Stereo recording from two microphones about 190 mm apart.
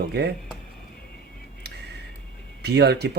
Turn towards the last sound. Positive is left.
turn(degrees=-60)  # may be behind; listen again after turning